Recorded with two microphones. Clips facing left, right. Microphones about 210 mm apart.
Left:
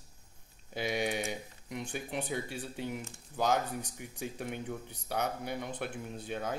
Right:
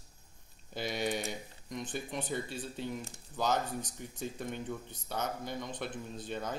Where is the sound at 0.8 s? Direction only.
10° left (ahead or behind).